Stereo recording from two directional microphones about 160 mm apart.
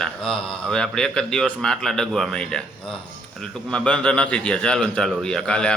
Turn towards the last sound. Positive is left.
turn(degrees=5)  # may be behind; listen again after turning